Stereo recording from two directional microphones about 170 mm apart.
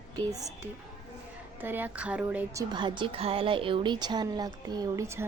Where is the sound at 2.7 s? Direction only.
30° right (ahead or behind).